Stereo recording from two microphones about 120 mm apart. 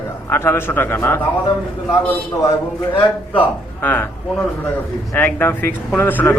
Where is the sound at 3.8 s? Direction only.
15° left (ahead or behind).